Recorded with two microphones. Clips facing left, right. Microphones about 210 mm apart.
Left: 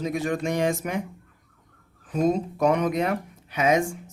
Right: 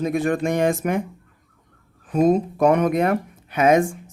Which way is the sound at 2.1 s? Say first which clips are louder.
Right 5 dB; 55° right (ahead or behind).